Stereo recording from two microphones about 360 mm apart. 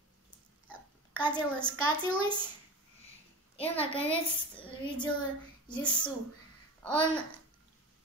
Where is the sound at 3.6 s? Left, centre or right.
Centre.